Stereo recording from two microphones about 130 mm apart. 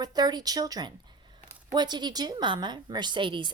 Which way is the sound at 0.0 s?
30° right (ahead or behind).